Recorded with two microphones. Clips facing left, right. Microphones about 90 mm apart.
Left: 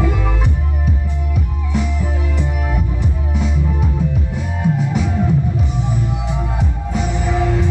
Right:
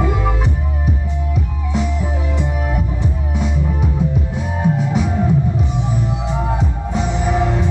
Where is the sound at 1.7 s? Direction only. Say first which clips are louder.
Right 1 dB; 20° right (ahead or behind).